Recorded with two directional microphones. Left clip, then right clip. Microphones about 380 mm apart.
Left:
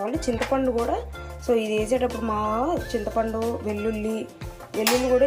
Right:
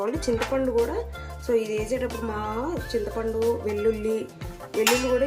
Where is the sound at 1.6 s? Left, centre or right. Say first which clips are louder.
Left 2 dB; left.